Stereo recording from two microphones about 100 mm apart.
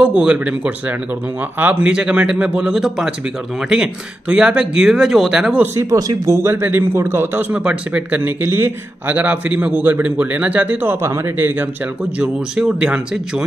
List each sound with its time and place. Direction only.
0.0 s a man's voice: 10° right (ahead or behind)
5.9 s a man's voice: 35° right (ahead or behind); by 13.5 s 5° right (ahead or behind)